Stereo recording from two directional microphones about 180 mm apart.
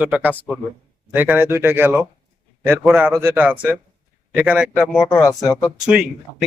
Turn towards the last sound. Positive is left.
turn(degrees=10)  # may be behind; listen again after turning